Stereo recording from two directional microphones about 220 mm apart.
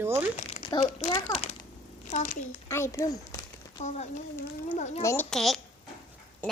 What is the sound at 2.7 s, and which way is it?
Speech, 15° left (ahead or behind).